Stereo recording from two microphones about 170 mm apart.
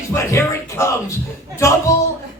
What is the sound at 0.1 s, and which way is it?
Speech, 15° left (ahead or behind).